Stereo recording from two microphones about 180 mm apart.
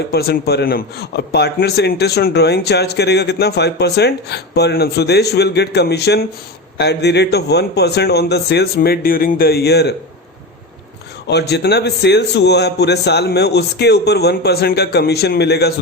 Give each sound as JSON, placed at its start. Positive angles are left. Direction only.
{"t": 0.1, "sound": "a man's voice", "side_deg": 60}
{"t": 11.3, "sound": "a man's voice", "side_deg": 70}